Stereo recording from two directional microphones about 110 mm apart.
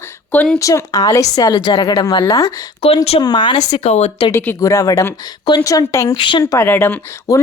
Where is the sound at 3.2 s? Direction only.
45° left (ahead or behind).